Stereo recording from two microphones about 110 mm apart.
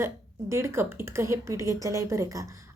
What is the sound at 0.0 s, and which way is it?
A woman's voice, 25° right (ahead or behind).